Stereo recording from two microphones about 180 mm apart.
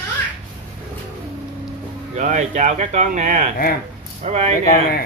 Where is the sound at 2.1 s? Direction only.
45° right (ahead or behind).